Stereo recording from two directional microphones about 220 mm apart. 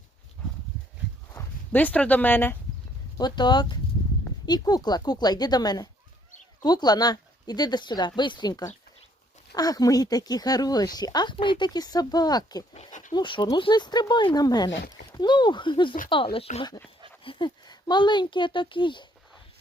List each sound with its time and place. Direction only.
0.4 s horse: 10° left (ahead or behind)
1.3 s speech: 10° left (ahead or behind)
3.2 s speech: 20° left (ahead or behind)
12.8 s dog: 35° left (ahead or behind)
13.1 s speech: 20° left (ahead or behind)
14.7 s speech: 55° left (ahead or behind)
15.1 s speech: 20° left (ahead or behind)